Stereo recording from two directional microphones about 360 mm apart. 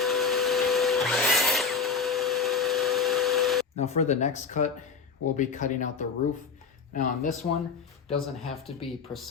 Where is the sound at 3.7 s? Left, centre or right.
Centre.